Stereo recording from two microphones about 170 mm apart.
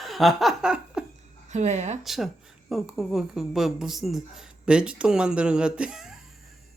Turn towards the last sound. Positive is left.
turn(degrees=-5)  # may be behind; listen again after turning